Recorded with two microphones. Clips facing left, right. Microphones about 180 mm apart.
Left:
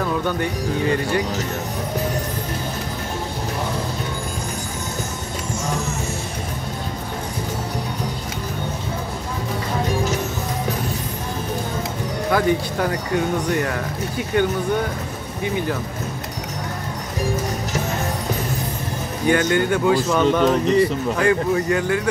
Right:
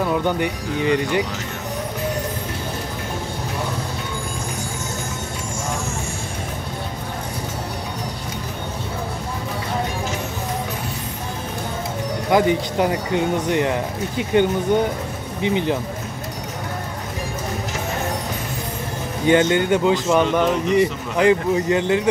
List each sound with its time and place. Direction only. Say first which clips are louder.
0.1 s speech: right 2 dB; 15° right (ahead or behind)
12.3 s speech: right 2 dB; 20° right (ahead or behind)
19.2 s speech: right 2 dB; 20° right (ahead or behind)